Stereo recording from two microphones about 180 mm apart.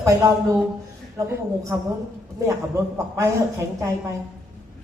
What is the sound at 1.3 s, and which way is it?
Speech, 15° right (ahead or behind).